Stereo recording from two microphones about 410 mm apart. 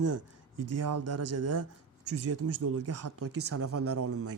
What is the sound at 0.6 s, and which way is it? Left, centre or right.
Speech, right.